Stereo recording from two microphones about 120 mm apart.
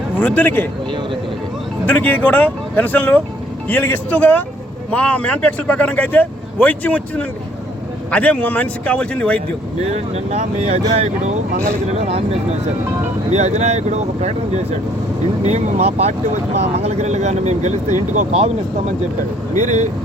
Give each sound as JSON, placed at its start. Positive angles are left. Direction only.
{"t": 0.2, "sound": "speech", "side_deg": 15}
{"t": 1.9, "sound": "speech", "side_deg": 15}
{"t": 9.8, "sound": "speech", "side_deg": -65}
{"t": 13.3, "sound": "speech", "side_deg": -70}
{"t": 19.5, "sound": "speech", "side_deg": -85}